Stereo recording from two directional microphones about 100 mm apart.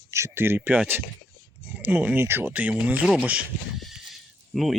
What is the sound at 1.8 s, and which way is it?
Speech, 15° right (ahead or behind).